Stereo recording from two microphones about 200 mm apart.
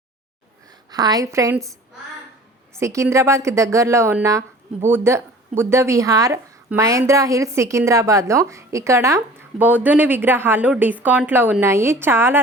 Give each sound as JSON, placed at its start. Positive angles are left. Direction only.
{"t": 0.9, "sound": "a woman's voice", "side_deg": -20}
{"t": 2.7, "sound": "a woman's voice", "side_deg": -15}